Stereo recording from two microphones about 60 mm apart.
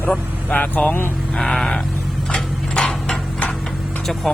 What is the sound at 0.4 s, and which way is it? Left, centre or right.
Speech, left.